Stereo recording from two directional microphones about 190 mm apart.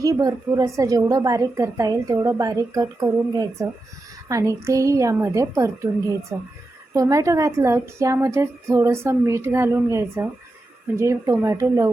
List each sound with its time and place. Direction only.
0.0 s a woman's voice: 20° right (ahead or behind)